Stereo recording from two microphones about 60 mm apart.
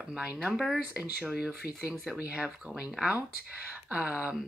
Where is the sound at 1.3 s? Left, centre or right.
Centre.